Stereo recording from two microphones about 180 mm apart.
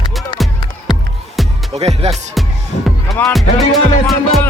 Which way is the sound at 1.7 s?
35° right (ahead or behind).